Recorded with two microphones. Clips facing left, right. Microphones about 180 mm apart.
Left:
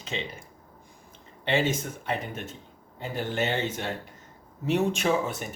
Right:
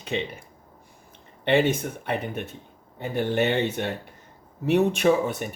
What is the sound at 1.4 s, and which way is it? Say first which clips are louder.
A man's voice: right 5 dB; 60° right (ahead or behind).